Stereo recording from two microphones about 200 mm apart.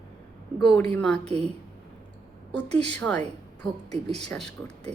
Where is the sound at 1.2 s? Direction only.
30° right (ahead or behind).